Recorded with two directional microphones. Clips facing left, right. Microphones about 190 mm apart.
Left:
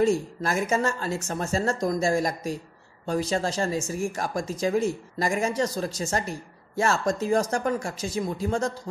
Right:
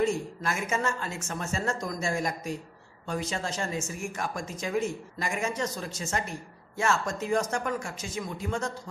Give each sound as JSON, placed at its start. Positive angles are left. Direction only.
{"t": 0.0, "sound": "speech", "side_deg": 35}